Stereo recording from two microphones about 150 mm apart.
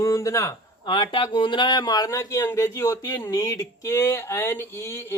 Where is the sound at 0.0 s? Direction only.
20° left (ahead or behind).